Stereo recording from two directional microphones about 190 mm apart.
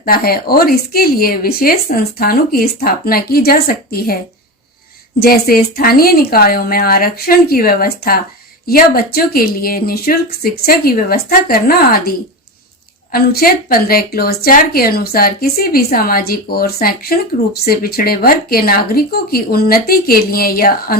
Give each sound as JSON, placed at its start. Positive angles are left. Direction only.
{"t": 0.0, "sound": "speech", "side_deg": 50}
{"t": 5.2, "sound": "speech", "side_deg": 55}